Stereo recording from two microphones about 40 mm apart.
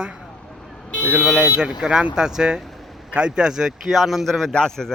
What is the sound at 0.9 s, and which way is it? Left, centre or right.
Vehicle, left.